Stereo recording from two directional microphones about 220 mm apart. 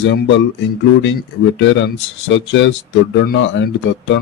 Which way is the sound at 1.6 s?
55° left (ahead or behind).